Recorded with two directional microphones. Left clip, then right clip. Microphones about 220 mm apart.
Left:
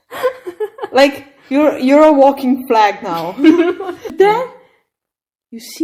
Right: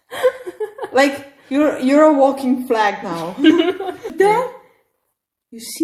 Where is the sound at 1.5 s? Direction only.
25° left (ahead or behind).